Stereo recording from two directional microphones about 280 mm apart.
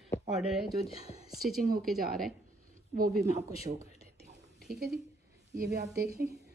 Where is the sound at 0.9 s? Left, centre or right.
Left.